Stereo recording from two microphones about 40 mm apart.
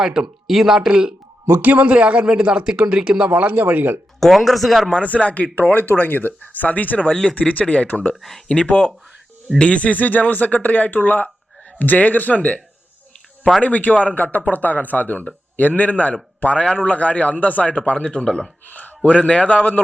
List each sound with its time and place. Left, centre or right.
0.0 s speech: centre
1.6 s speech: right; by 3.3 s centre
3.3 s speech: right
4.2 s speech: centre
5.0 s speech: left
5.7 s speech: left
13.6 s speech: left
17.9 s speech: left
18.7 s speech: left